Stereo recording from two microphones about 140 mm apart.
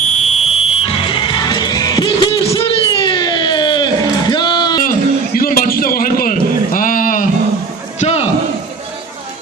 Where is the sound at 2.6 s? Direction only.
30° left (ahead or behind).